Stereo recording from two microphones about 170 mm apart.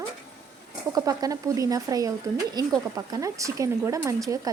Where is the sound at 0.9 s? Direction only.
20° right (ahead or behind).